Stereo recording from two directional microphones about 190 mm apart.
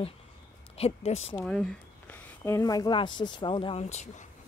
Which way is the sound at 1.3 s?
5° left (ahead or behind).